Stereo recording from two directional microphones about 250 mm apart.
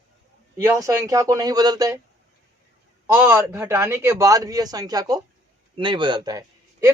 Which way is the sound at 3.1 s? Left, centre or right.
Centre.